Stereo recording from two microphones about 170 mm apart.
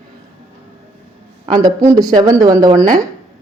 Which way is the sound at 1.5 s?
20° right (ahead or behind).